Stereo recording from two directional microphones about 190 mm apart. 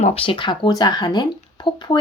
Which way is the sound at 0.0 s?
30° left (ahead or behind).